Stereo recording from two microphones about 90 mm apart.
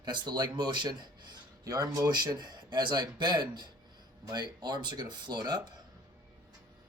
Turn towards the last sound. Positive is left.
turn(degrees=-50)  # may be behind; listen again after turning